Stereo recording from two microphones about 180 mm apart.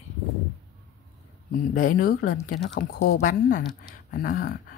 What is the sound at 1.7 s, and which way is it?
Speech, 45° left (ahead or behind).